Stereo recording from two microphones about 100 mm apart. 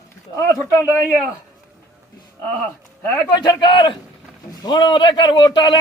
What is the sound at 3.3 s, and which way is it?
A man's voice, 45° left (ahead or behind).